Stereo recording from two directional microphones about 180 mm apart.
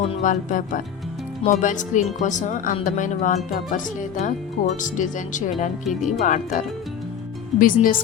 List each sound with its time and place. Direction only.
0.0 s speech: 45° left (ahead or behind)